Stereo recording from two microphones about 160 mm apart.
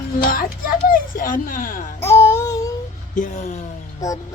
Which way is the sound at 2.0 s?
15° left (ahead or behind).